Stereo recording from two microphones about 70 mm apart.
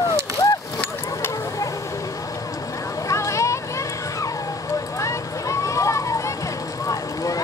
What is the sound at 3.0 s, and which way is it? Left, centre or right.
Vehicle, left.